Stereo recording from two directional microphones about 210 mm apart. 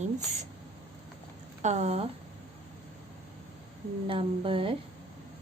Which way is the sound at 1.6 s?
30° right (ahead or behind).